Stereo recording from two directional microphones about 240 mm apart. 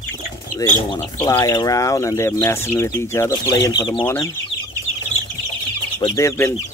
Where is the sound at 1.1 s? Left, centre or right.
Centre.